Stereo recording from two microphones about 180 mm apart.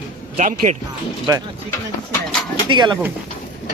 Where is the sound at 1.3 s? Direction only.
20° right (ahead or behind).